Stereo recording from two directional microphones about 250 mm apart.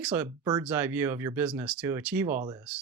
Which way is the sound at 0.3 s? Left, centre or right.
Centre.